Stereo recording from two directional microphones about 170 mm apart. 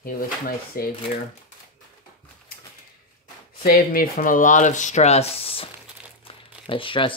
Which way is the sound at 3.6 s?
60° left (ahead or behind).